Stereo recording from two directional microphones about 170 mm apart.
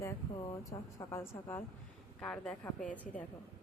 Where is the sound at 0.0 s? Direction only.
20° left (ahead or behind).